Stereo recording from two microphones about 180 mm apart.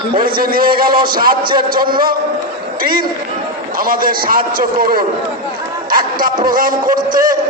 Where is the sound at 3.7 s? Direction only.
50° right (ahead or behind).